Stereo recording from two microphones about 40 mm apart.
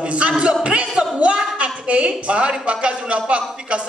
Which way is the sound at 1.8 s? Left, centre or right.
Right.